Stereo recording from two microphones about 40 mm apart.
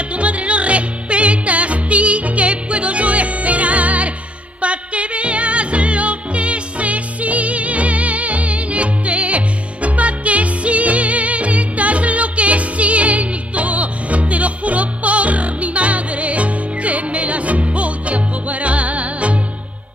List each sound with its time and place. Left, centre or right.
0.1 s music: right